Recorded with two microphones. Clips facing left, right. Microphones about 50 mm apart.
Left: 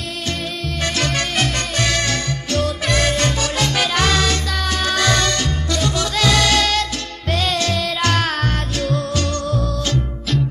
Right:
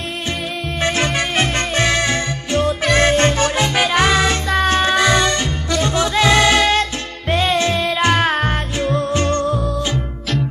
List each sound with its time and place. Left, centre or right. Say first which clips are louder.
0.8 s music: right 3 dB; right
4.9 s music: right 3 dB; centre